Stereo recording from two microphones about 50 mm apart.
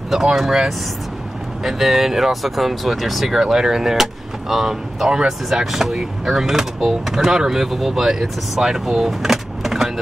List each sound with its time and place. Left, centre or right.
0.1 s speech: centre